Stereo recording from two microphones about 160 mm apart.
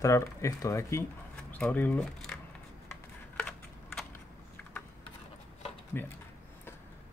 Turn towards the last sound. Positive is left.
turn(degrees=15)  # may be behind; listen again after turning